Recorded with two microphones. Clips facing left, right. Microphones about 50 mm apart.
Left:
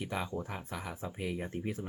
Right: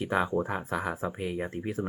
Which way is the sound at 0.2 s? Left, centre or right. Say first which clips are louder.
Right 10 dB; right.